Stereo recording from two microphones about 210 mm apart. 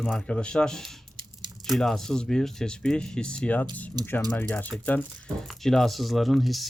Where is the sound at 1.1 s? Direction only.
20° right (ahead or behind).